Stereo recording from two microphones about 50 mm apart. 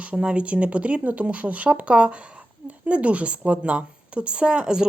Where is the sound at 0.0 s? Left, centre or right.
Right.